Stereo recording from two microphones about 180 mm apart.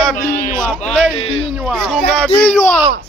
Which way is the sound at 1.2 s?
30° left (ahead or behind).